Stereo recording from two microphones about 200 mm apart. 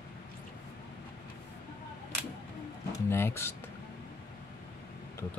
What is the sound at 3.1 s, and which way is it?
Speech, 10° left (ahead or behind).